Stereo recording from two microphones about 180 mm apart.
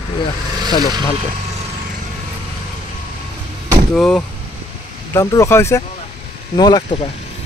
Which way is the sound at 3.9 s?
Centre (ahead or behind).